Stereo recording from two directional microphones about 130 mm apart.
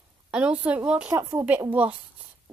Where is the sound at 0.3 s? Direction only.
10° right (ahead or behind).